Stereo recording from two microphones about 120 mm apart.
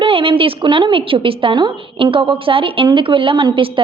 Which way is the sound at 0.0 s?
50° right (ahead or behind).